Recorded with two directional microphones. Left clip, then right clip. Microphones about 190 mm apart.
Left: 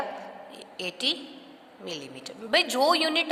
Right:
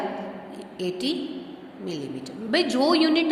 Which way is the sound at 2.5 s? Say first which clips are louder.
Even; 40° left (ahead or behind).